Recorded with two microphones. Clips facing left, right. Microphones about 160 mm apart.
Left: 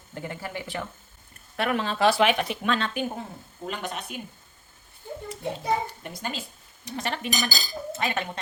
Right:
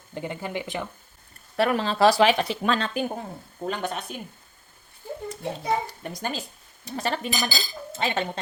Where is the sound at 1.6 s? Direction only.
35° right (ahead or behind).